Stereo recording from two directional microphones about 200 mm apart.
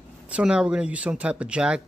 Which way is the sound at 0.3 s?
5° right (ahead or behind).